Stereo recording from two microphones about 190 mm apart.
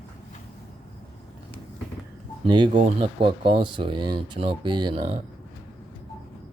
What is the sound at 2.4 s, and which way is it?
Speech, 25° right (ahead or behind).